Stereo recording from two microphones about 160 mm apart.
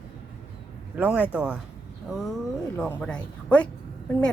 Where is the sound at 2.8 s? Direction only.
10° left (ahead or behind).